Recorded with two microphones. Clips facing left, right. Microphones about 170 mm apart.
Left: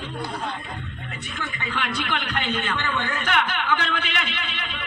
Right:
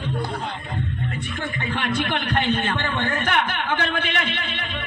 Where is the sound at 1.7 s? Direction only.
50° right (ahead or behind).